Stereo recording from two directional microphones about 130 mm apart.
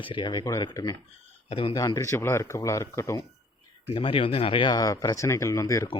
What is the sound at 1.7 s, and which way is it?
Speech, 25° left (ahead or behind).